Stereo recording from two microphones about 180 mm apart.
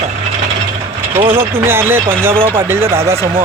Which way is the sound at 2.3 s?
30° right (ahead or behind).